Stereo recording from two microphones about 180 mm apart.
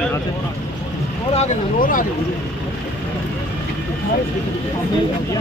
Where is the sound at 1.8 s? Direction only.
50° left (ahead or behind).